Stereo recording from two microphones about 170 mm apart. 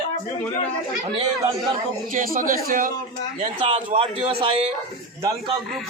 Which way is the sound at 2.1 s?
55° right (ahead or behind).